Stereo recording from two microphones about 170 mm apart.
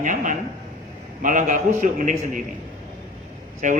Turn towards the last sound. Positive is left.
turn(degrees=-50)  # may be behind; listen again after turning